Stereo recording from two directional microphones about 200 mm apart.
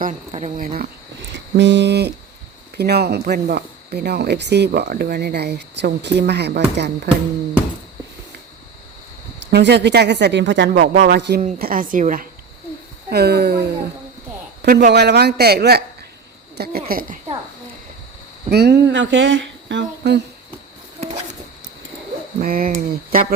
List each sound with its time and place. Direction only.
0.3 s speech: 30° right (ahead or behind)
0.6 s a man's voice: 45° right (ahead or behind)
1.5 s a man's voice: 60° right (ahead or behind)
9.5 s speech: 55° right (ahead or behind)
10.8 s speech: 50° right (ahead or behind)
11.3 s a man's voice: 40° right (ahead or behind)
13.1 s a man's voice: 55° right (ahead or behind)
14.6 s a man's voice: 40° right (ahead or behind)
18.5 s speech: 55° right (ahead or behind)
22.4 s a man's voice: 45° right (ahead or behind)